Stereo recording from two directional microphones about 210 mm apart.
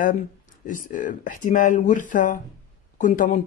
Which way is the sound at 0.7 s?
40° left (ahead or behind).